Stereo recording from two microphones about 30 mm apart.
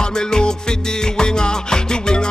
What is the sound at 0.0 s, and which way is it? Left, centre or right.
Music, left.